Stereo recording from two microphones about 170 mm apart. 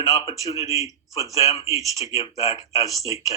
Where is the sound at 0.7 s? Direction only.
20° right (ahead or behind).